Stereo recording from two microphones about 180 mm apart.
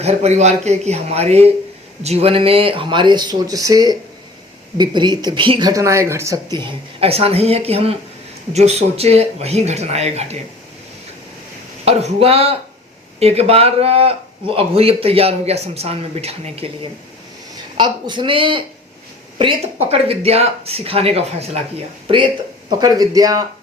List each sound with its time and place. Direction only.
0.0 s a man's voice: 35° right (ahead or behind)
11.9 s a man's voice: 35° right (ahead or behind)
17.7 s a man's voice: 25° right (ahead or behind)